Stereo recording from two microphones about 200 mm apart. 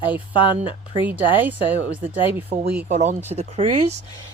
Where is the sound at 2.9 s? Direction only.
35° right (ahead or behind).